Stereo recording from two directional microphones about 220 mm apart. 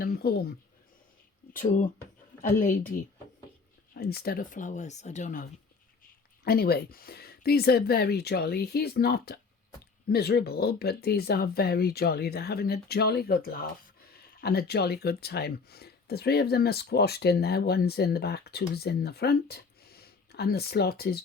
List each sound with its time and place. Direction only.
0.0 s speech: 45° left (ahead or behind)
1.5 s speech: 40° left (ahead or behind)
3.9 s speech: 45° left (ahead or behind)